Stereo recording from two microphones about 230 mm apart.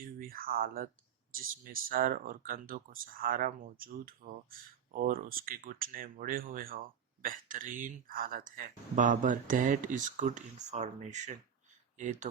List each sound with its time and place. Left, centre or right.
0.0 s speech: right